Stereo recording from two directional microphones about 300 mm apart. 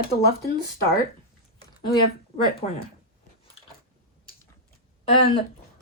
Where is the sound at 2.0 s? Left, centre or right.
Centre.